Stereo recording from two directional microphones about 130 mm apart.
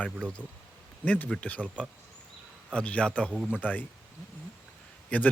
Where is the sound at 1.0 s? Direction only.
10° left (ahead or behind).